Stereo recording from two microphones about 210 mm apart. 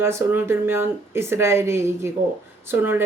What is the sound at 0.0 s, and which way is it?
Speech, 10° right (ahead or behind).